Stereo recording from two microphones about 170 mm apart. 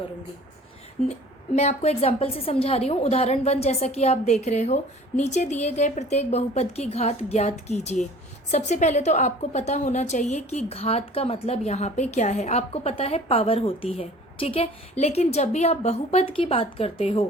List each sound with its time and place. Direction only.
1.5 s a woman's voice: 40° left (ahead or behind)